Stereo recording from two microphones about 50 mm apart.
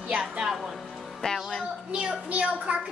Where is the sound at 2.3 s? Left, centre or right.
Right.